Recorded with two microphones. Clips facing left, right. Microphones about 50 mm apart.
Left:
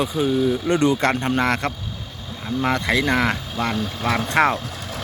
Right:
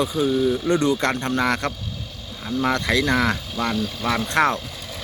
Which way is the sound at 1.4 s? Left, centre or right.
Centre.